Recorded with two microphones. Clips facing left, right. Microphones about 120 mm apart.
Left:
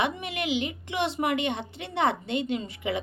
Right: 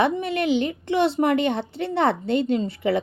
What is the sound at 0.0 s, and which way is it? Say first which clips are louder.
Speech: right 7 dB; 35° right (ahead or behind).